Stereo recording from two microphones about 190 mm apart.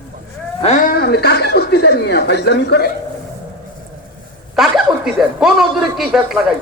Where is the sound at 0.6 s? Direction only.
40° left (ahead or behind); by 2.9 s 65° left (ahead or behind).